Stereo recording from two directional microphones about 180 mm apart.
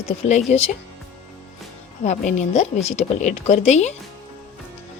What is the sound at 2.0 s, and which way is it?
A woman's voice, 40° left (ahead or behind).